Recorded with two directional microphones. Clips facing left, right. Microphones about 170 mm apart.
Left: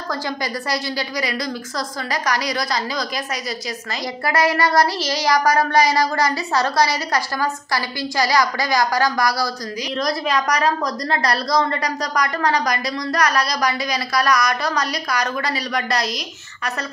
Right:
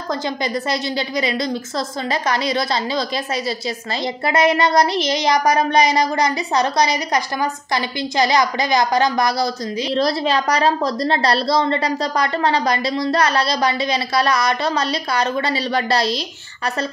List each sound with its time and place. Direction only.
0.7 s a woman's voice: 25° right (ahead or behind)
4.3 s a woman's voice: 20° right (ahead or behind)